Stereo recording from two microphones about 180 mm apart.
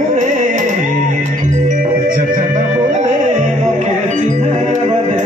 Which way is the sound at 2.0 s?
50° right (ahead or behind).